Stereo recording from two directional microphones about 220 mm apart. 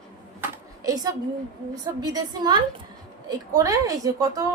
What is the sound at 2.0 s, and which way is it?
A woman's voice, 20° right (ahead or behind).